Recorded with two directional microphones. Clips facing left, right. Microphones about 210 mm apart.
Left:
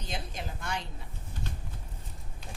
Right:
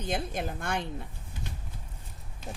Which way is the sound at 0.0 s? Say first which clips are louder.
Right 7 dB; 55° right (ahead or behind).